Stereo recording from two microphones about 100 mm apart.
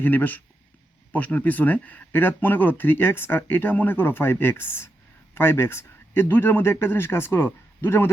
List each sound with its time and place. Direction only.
0.0 s a man's voice: 20° left (ahead or behind)